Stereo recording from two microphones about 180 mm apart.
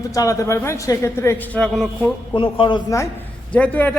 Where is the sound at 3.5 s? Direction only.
10° left (ahead or behind).